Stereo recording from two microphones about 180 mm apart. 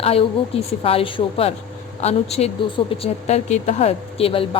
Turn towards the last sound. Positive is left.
turn(degrees=30)  # may be behind; listen again after turning